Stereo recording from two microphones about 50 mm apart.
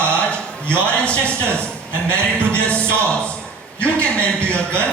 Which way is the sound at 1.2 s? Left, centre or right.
Left.